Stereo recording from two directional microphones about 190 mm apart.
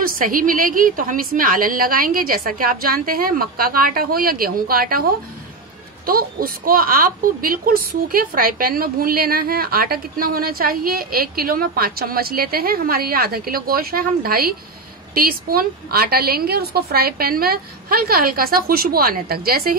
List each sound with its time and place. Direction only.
0.0 s a woman's voice: 50° right (ahead or behind)
6.0 s a woman's voice: 50° right (ahead or behind)